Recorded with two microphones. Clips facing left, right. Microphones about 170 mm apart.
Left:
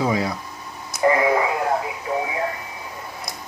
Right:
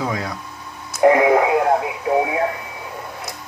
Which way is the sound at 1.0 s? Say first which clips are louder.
Right 5 dB; 65° right (ahead or behind).